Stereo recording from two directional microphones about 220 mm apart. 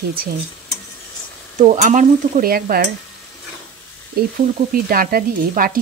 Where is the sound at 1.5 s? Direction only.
30° right (ahead or behind).